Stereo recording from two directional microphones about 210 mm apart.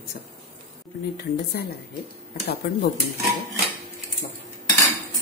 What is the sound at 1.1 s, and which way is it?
Speech, 50° left (ahead or behind).